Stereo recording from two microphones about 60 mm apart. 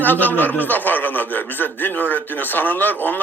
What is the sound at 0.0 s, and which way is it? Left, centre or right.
A man's voice, left.